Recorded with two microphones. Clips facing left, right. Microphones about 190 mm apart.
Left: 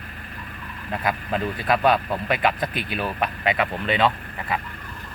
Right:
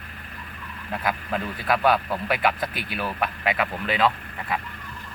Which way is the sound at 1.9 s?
5° right (ahead or behind).